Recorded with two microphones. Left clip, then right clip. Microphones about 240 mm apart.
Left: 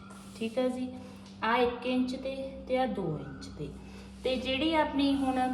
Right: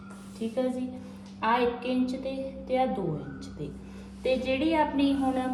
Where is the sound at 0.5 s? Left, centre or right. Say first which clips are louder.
Right 1 dB; centre.